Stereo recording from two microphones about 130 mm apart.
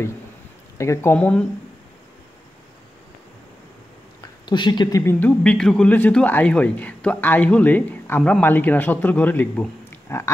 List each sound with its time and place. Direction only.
0.7 s speech: 20° left (ahead or behind)
1.1 s speech: 10° left (ahead or behind)
4.2 s a sound: 35° left (ahead or behind)
5.0 s speech: 10° left (ahead or behind)